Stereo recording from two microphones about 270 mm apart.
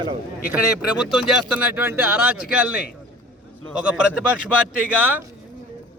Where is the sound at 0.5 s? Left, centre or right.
Centre.